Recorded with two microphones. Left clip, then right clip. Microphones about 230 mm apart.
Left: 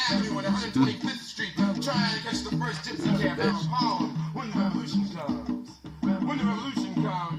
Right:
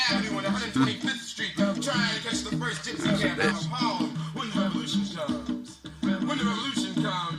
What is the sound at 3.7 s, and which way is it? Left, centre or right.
Music, left.